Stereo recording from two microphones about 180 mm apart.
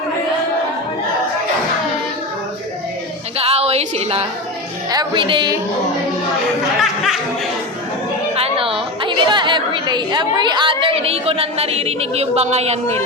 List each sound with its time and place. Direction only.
3.3 s music: 35° right (ahead or behind)
4.9 s music: 25° right (ahead or behind)
8.4 s a woman's voice: 30° right (ahead or behind)